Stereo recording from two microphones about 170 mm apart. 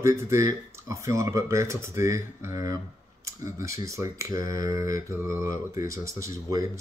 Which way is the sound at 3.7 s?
20° right (ahead or behind).